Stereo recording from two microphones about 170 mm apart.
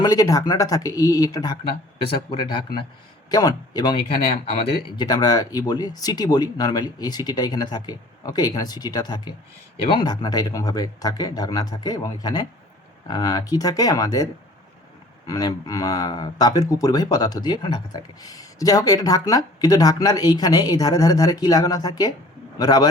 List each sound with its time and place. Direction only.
0.0 s speech: 20° left (ahead or behind)
15.3 s speech: 20° left (ahead or behind)